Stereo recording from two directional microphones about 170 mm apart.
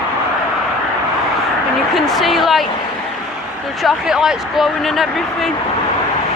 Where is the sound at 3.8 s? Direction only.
5° right (ahead or behind).